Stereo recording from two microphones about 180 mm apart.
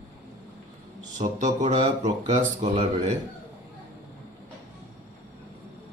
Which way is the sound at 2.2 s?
35° right (ahead or behind).